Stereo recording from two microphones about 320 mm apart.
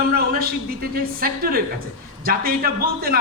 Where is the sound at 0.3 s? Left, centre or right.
Right.